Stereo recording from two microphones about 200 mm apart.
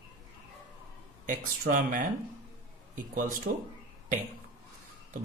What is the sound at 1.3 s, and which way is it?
Speech, 40° right (ahead or behind).